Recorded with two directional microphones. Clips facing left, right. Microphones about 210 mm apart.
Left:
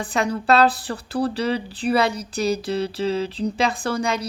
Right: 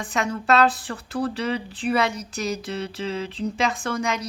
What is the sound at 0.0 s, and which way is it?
Speech, 35° left (ahead or behind).